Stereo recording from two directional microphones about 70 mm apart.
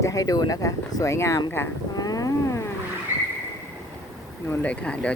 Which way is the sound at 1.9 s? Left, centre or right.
Left.